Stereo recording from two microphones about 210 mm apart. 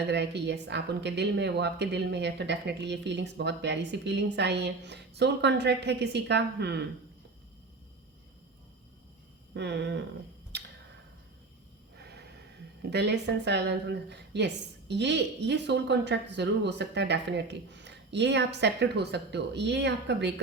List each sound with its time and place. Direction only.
0.1 s speech: 55° right (ahead or behind)
9.6 s speech: 55° right (ahead or behind)
11.9 s snort: 50° right (ahead or behind)
12.8 s speech: 55° right (ahead or behind)